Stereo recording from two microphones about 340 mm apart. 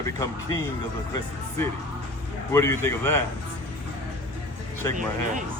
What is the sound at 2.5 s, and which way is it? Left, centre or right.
Speech, centre.